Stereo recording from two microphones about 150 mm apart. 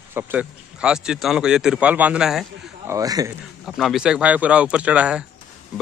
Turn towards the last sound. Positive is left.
turn(degrees=-10)  # may be behind; listen again after turning